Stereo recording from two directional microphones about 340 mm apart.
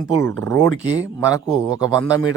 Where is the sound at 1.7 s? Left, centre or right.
Centre.